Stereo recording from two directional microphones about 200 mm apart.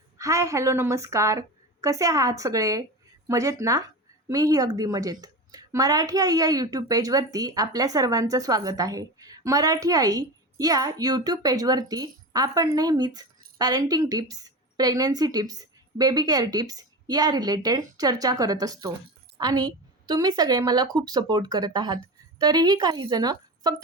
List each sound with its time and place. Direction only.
0.2 s a woman's voice: 15° right (ahead or behind)